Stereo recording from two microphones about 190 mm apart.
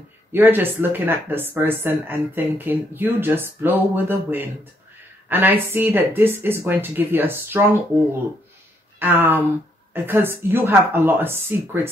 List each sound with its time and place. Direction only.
0.3 s speech: 10° right (ahead or behind)